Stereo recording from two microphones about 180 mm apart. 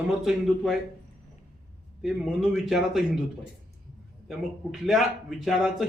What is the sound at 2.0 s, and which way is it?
A man's voice, centre (ahead or behind).